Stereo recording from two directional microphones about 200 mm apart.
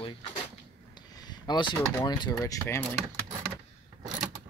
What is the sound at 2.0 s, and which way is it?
Speech, 20° left (ahead or behind).